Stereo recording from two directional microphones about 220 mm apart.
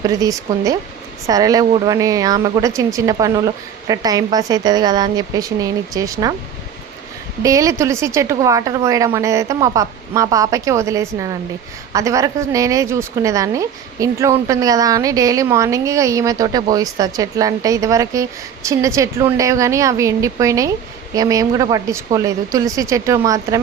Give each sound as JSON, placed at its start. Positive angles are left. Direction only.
{"t": 0.0, "sound": "a woman's voice", "side_deg": -15}
{"t": 7.4, "sound": "a woman's voice", "side_deg": -15}